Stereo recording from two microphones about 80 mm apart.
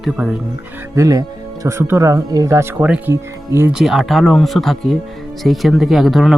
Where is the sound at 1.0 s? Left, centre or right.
Right.